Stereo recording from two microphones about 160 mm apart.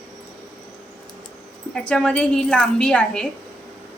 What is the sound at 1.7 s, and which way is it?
A woman's voice, 5° left (ahead or behind).